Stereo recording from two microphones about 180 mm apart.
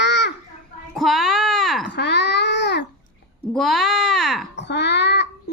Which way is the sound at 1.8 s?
70° left (ahead or behind).